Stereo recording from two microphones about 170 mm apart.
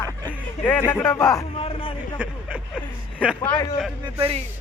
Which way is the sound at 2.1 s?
10° right (ahead or behind).